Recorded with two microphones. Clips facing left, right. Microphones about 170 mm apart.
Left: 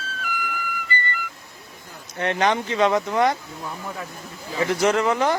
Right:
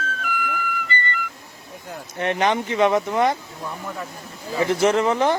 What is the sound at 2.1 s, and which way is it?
Speech, 20° right (ahead or behind).